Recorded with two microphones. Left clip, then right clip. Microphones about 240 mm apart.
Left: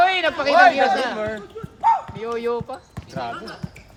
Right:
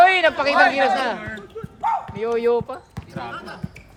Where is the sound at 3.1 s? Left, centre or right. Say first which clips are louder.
Left 3 dB; centre.